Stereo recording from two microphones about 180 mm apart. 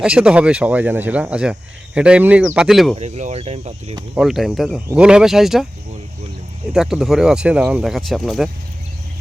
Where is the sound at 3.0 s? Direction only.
40° right (ahead or behind).